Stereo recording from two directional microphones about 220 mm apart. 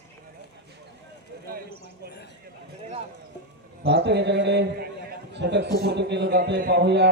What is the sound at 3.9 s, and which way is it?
A man's voice, 50° right (ahead or behind).